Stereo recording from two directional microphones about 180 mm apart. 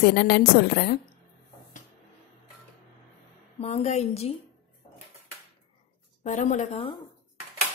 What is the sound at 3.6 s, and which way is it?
Speech, 35° left (ahead or behind).